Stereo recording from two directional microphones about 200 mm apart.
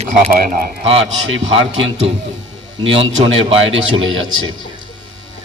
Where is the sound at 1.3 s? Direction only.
75° right (ahead or behind).